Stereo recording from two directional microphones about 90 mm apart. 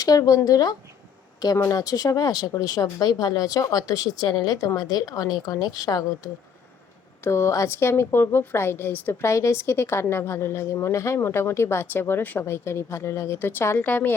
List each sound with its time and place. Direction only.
0.0 s speech: 40° left (ahead or behind)
7.3 s a woman's voice: 30° left (ahead or behind)
9.2 s a woman's voice: 35° left (ahead or behind)